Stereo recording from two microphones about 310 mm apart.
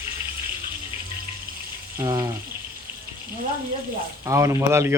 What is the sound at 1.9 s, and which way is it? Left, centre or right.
Speech, centre.